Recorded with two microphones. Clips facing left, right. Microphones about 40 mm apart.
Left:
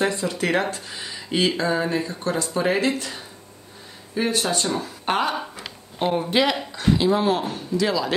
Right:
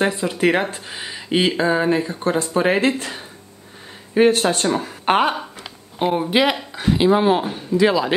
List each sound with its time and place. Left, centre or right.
0.0 s speech: right
4.1 s speech: right
6.1 s speech: centre